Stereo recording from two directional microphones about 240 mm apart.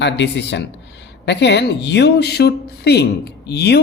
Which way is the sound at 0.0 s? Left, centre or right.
Left.